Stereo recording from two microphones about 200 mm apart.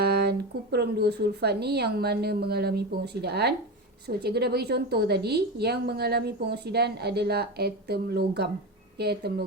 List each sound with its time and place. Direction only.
0.0 s a woman's voice: 55° right (ahead or behind)